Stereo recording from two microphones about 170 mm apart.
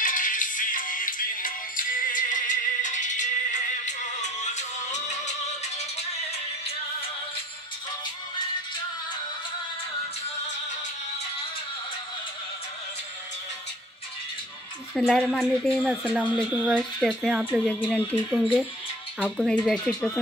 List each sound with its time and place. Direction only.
0.0 s music: 50° left (ahead or behind)
15.0 s speech: centre (ahead or behind)